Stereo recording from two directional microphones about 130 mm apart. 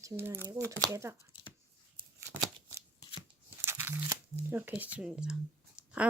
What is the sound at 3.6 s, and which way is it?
Tearing, 20° right (ahead or behind).